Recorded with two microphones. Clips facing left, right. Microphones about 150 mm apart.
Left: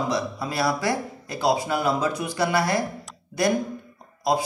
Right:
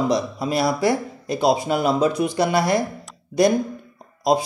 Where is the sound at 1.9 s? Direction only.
30° right (ahead or behind).